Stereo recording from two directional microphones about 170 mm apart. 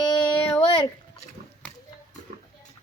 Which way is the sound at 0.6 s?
30° left (ahead or behind).